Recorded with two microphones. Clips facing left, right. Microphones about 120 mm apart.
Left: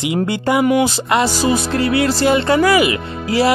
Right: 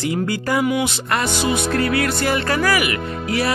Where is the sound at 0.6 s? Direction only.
35° left (ahead or behind).